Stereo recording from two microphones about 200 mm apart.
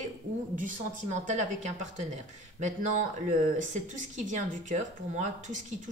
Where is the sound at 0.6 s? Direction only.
40° right (ahead or behind).